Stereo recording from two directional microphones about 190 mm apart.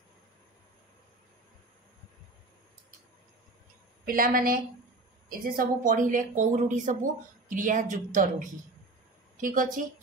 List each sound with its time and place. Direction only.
4.0 s a woman's voice: 50° right (ahead or behind)